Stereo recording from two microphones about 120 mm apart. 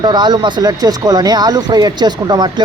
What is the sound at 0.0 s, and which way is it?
Speech, 35° right (ahead or behind).